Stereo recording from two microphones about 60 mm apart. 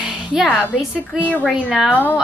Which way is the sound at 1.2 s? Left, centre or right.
Left.